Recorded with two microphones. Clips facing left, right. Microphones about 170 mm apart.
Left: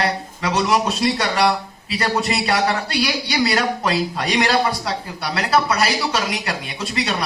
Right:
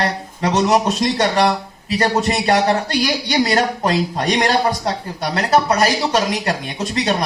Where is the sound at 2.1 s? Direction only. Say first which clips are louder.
Right 2 dB; 45° right (ahead or behind).